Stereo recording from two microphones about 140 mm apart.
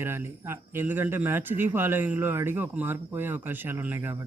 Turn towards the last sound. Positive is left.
turn(degrees=-15)  # may be behind; listen again after turning